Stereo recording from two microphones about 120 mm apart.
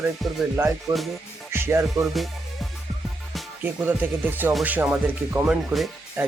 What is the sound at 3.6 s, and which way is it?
Speech, 15° right (ahead or behind).